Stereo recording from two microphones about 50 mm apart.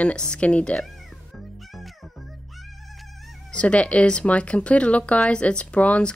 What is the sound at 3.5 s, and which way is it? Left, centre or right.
Speech, left.